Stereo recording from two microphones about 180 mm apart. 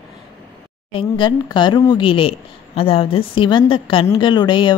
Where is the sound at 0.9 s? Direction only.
25° left (ahead or behind).